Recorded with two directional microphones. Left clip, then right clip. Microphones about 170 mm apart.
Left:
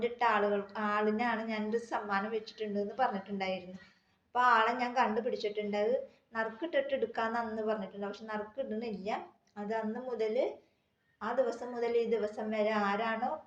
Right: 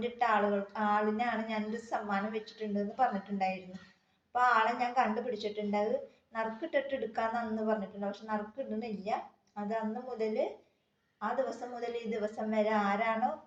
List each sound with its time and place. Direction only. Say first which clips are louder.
0.0 s a woman's voice: even; 25° left (ahead or behind)